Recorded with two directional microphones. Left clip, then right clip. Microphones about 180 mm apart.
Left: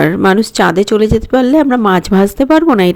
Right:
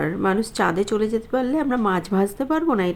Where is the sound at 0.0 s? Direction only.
55° left (ahead or behind).